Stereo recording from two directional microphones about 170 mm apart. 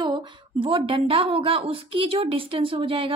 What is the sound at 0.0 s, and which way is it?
A woman's voice, 25° right (ahead or behind).